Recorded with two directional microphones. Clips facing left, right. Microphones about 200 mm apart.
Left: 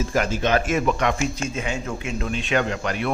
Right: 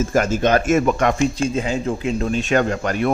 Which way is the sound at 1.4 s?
35° right (ahead or behind).